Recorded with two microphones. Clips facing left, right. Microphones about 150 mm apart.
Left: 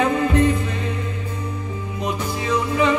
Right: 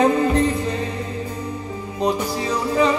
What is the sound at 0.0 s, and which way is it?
Music, 35° right (ahead or behind).